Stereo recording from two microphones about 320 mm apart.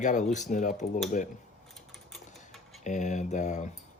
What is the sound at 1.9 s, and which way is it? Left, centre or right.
Typing, centre.